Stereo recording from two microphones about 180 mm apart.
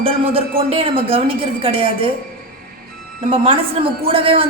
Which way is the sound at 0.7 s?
30° right (ahead or behind).